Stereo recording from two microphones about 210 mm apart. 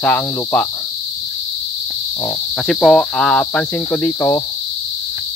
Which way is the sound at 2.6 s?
Centre (ahead or behind).